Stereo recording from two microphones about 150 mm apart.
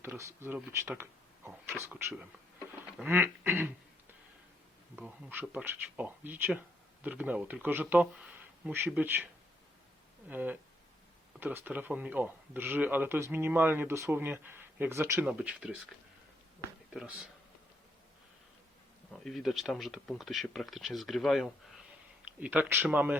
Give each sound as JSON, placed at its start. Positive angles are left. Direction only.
{"t": 0.0, "sound": "speech", "side_deg": -20}
{"t": 4.9, "sound": "speech", "side_deg": -10}
{"t": 10.2, "sound": "speech", "side_deg": -10}
{"t": 15.3, "sound": "speech", "side_deg": -10}
{"t": 16.9, "sound": "speech", "side_deg": -5}
{"t": 19.1, "sound": "speech", "side_deg": 0}